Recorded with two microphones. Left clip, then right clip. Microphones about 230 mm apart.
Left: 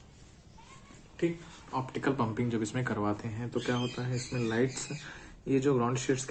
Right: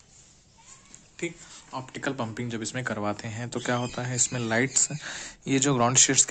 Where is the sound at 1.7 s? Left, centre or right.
Right.